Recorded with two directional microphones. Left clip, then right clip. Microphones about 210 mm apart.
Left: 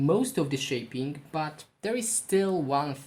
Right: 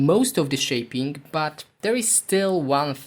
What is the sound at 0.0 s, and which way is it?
Speech, 50° right (ahead or behind).